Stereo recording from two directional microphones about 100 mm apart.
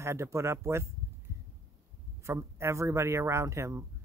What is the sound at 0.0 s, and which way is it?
Speech, 25° right (ahead or behind).